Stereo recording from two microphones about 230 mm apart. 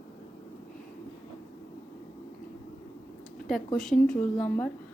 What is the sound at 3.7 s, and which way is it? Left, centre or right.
Speech, centre.